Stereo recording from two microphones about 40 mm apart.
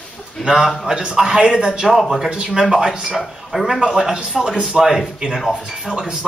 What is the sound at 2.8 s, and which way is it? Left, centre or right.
Speech, centre.